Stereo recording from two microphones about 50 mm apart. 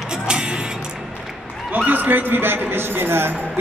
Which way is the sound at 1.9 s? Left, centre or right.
Right.